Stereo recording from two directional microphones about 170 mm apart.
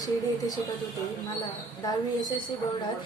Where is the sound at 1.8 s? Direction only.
25° left (ahead or behind).